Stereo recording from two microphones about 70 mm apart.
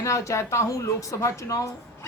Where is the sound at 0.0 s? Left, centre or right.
Left.